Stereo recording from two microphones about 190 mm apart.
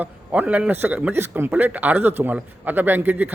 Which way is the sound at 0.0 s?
10° right (ahead or behind).